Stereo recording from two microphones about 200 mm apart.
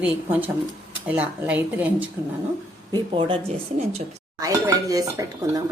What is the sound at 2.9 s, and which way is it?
Speech, 25° right (ahead or behind).